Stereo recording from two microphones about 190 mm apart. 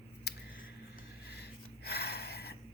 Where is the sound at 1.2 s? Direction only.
60° left (ahead or behind).